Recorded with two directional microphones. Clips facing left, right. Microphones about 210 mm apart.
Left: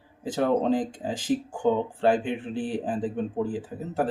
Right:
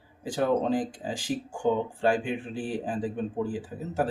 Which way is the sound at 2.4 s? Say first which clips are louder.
Left 3 dB; 5° right (ahead or behind).